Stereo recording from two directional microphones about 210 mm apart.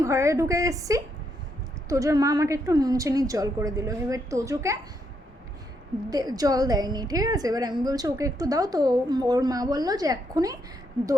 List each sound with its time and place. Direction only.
0.0 s a woman's voice: 15° right (ahead or behind)
6.1 s a woman's voice: 15° right (ahead or behind)